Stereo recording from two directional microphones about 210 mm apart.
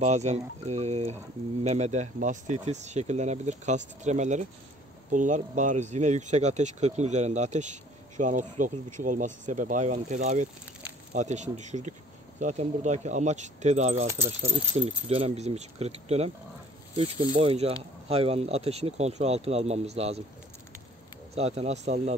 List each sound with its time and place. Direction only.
0.0 s speech: 30° right (ahead or behind)
14.0 s speech: 10° right (ahead or behind)
14.8 s speech: 25° right (ahead or behind)
21.4 s speech: 30° right (ahead or behind)